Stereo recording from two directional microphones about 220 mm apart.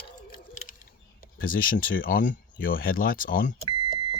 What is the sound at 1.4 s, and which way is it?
Speech, 40° left (ahead or behind).